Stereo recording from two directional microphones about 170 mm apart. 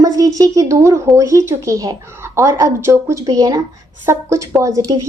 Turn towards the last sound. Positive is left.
turn(degrees=-20)  # may be behind; listen again after turning